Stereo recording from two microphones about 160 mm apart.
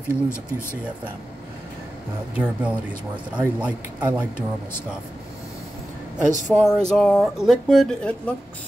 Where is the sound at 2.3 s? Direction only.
10° right (ahead or behind).